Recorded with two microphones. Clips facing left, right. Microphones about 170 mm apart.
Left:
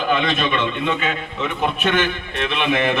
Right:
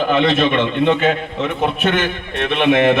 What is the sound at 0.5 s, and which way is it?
A man's voice, 50° right (ahead or behind).